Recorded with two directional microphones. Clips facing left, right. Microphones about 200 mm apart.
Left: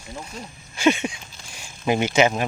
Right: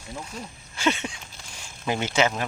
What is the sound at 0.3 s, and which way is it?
Speech, 15° left (ahead or behind).